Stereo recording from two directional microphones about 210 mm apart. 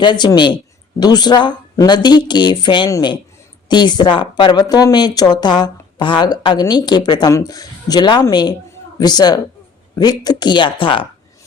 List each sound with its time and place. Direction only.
0.0 s speech: 20° left (ahead or behind)